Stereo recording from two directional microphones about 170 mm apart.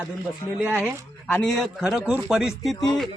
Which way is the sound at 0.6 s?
5° right (ahead or behind).